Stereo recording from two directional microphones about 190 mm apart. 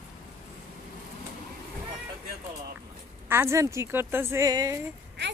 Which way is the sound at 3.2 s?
15° right (ahead or behind).